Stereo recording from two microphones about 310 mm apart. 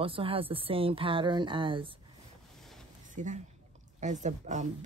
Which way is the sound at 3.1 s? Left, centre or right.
Right.